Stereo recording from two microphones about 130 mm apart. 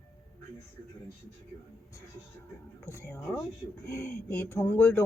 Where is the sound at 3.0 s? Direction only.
20° left (ahead or behind).